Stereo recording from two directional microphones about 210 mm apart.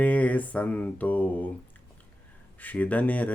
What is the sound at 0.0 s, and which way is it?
Mantra, 5° left (ahead or behind).